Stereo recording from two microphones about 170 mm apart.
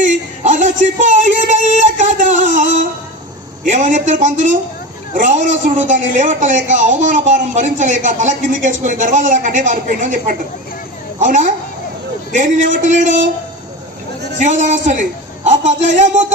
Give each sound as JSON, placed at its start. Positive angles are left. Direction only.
{"t": 0.0, "sound": "a sound", "side_deg": -45}
{"t": 3.7, "sound": "a woman's voice", "side_deg": -45}
{"t": 14.3, "sound": "a woman's voice", "side_deg": -45}